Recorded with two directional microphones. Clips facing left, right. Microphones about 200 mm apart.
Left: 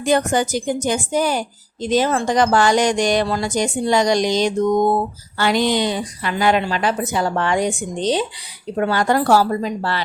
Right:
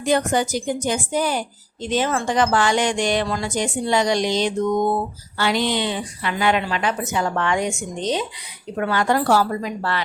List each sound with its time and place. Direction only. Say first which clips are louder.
0.0 s a woman's voice: left 2 dB; 45° left (ahead or behind); by 10.0 s 30° left (ahead or behind)